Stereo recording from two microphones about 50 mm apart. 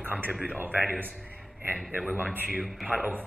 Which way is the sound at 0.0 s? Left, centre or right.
Right.